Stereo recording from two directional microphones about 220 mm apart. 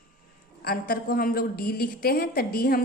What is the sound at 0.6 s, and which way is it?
A woman's voice, 45° left (ahead or behind).